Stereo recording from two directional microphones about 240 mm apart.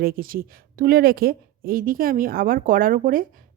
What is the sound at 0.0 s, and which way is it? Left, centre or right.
Speech, right.